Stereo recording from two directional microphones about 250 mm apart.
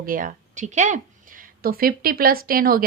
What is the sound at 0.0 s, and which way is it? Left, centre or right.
A woman's voice, right.